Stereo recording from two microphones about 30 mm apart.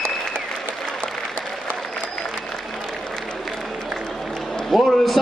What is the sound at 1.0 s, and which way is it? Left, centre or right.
Applause, left.